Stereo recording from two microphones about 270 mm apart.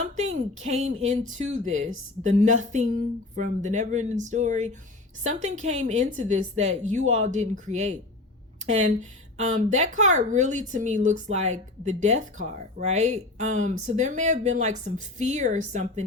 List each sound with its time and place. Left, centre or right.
0.0 s speech: right